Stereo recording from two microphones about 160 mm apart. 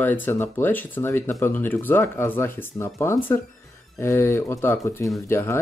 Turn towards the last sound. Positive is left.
turn(degrees=15)  # may be behind; listen again after turning